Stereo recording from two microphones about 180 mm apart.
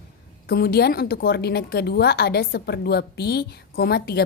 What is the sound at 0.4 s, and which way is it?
A woman's voice, 55° left (ahead or behind).